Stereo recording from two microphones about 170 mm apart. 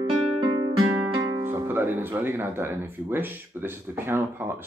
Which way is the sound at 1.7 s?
10° right (ahead or behind).